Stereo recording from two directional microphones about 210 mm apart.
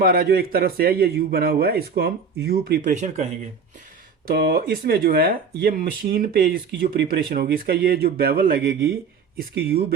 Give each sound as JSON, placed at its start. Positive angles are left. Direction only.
{"t": 0.0, "sound": "speech", "side_deg": -45}
{"t": 4.3, "sound": "speech", "side_deg": -45}